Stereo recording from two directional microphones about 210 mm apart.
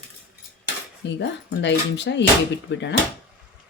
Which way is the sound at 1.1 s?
55° left (ahead or behind).